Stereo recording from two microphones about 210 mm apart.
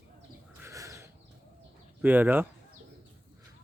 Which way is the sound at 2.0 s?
10° right (ahead or behind).